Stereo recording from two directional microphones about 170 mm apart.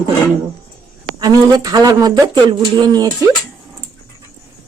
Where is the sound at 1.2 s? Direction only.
25° right (ahead or behind).